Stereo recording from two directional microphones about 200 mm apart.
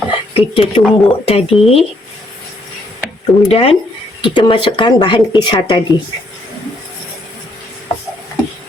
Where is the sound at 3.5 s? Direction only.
30° left (ahead or behind).